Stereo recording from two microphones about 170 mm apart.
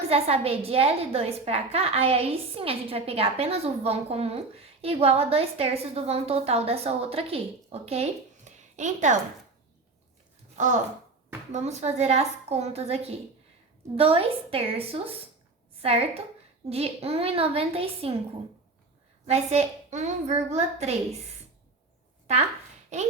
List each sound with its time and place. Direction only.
0.1 s a woman's voice: 35° right (ahead or behind)
11.5 s a woman's voice: 40° right (ahead or behind)
19.3 s a woman's voice: 40° right (ahead or behind)